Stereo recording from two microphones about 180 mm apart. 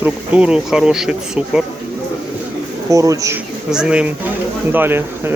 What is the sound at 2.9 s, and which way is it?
Speech, 20° right (ahead or behind).